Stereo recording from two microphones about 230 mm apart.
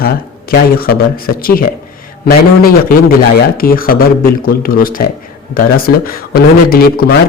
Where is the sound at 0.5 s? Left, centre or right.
Left.